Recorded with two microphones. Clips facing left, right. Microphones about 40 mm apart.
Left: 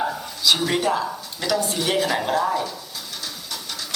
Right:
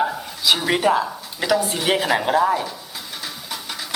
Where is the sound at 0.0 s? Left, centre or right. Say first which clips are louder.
Right 2 dB; centre.